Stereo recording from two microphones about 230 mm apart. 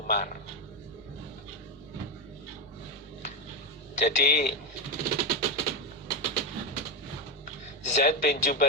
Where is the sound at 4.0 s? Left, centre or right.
Left.